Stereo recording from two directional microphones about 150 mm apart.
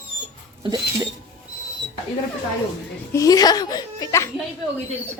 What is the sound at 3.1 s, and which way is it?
A child's voice, 25° left (ahead or behind).